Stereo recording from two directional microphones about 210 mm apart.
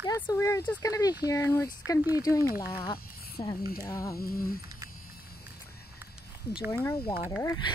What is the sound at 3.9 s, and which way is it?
Speech, 15° left (ahead or behind).